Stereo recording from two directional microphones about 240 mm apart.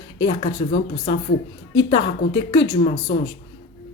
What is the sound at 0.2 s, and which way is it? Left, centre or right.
A woman's voice, left.